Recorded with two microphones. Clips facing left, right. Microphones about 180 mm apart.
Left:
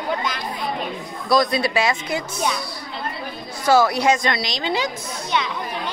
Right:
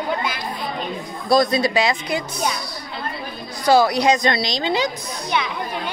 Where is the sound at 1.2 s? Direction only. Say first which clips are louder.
Right 2 dB; 25° right (ahead or behind).